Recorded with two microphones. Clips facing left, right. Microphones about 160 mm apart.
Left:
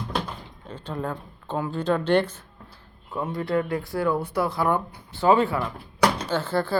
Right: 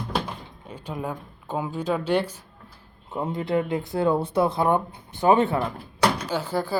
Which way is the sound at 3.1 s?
25° right (ahead or behind).